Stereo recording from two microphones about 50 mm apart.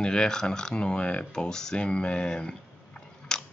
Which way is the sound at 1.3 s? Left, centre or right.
Centre.